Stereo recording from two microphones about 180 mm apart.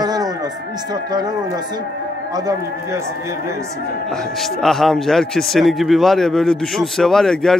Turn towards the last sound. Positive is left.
turn(degrees=0)  # may be behind; listen again after turning